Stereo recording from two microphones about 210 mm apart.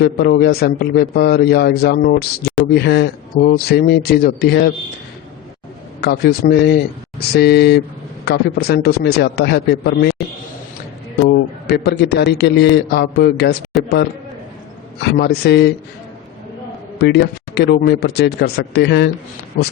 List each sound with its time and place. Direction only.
0.0 s a man's voice: 50° left (ahead or behind)
6.0 s a man's voice: 50° left (ahead or behind)
11.7 s a man's voice: 50° left (ahead or behind)
15.0 s a man's voice: 50° left (ahead or behind)
17.0 s a man's voice: 50° left (ahead or behind)